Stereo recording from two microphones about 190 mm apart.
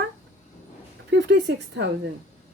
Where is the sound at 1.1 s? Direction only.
70° right (ahead or behind).